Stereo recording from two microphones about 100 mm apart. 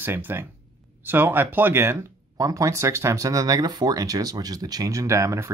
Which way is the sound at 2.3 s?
35° right (ahead or behind).